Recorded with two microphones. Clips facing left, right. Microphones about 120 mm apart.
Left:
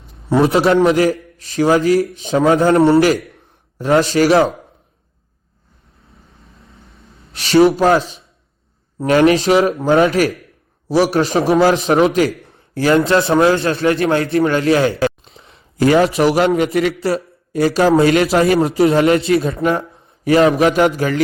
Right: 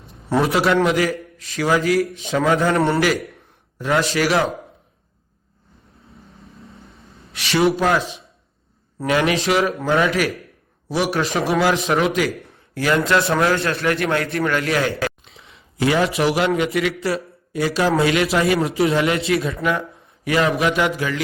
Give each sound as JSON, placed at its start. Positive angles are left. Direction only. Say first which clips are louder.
{"t": 0.4, "sound": "a man's voice", "louder": "left 5 dB", "side_deg": 25}
{"t": 6.4, "sound": "vehicle", "louder": "right 4 dB", "side_deg": 0}
{"t": 7.3, "sound": "a man's voice", "louder": "left 7 dB", "side_deg": 30}
{"t": 12.5, "sound": "a sound", "louder": "left 6 dB", "side_deg": 30}
{"t": 13.1, "sound": "a man's voice", "louder": "left 5 dB", "side_deg": 30}
{"t": 15.8, "sound": "a man's voice", "louder": "left 6 dB", "side_deg": 45}
{"t": 18.6, "sound": "a man's voice", "louder": "left 6 dB", "side_deg": 30}